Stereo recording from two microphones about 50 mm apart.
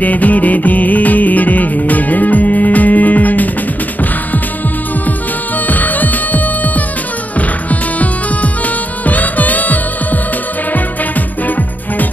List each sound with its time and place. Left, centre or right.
0.0 s music: left
5.7 s music: left
8.0 s music: left